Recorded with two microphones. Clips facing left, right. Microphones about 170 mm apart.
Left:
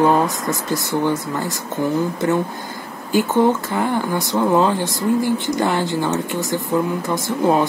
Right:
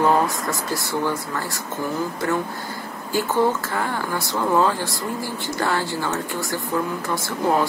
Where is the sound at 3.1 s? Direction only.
20° left (ahead or behind).